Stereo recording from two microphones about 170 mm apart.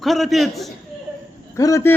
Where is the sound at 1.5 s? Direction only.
20° left (ahead or behind).